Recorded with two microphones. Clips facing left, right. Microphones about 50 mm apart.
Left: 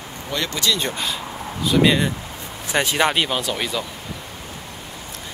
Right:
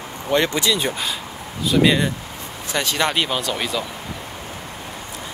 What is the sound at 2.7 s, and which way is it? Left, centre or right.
Speech, left.